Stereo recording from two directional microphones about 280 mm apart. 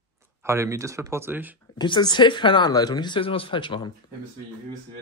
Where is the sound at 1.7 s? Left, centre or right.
Centre.